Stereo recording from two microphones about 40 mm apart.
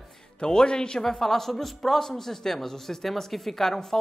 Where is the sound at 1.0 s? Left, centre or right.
Centre.